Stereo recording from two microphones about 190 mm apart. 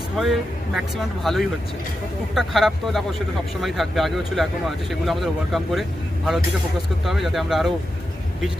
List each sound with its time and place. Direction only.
0.2 s speech: centre (ahead or behind)
7.0 s speech: centre (ahead or behind)